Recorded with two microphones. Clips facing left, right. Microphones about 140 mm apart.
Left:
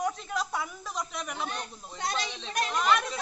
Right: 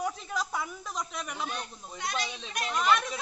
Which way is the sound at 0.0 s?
Centre (ahead or behind).